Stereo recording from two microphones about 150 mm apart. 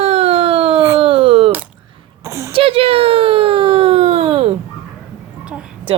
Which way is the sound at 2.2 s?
20° right (ahead or behind).